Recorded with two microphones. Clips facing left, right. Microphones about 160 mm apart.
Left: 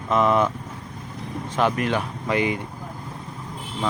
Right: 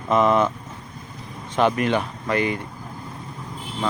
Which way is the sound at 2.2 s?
15° left (ahead or behind).